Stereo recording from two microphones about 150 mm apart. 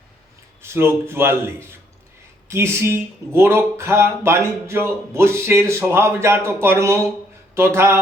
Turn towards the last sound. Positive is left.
turn(degrees=-15)  # may be behind; listen again after turning